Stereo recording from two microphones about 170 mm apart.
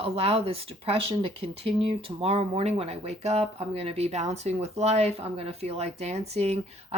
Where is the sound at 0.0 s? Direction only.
35° right (ahead or behind).